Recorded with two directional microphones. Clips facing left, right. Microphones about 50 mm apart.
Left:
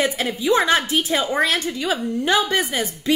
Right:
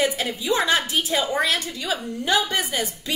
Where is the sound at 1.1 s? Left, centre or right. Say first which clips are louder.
Left 2 dB; left.